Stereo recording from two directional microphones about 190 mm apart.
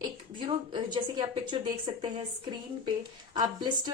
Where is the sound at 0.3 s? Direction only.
25° right (ahead or behind).